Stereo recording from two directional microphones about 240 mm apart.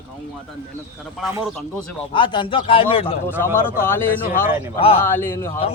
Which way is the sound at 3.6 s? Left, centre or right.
Centre.